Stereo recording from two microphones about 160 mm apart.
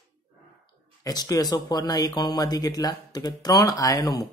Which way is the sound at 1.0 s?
25° left (ahead or behind).